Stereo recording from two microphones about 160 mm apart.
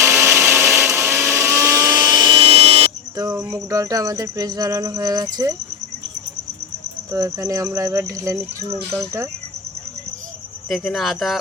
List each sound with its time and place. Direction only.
0.0 s a sound: 15° right (ahead or behind); by 2.9 s 35° right (ahead or behind)
3.2 s cricket: 20° right (ahead or behind)
7.1 s cricket: 20° right (ahead or behind)
10.7 s speech: centre (ahead or behind)